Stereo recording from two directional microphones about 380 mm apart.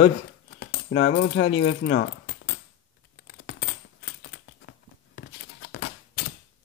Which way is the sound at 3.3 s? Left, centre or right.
Left.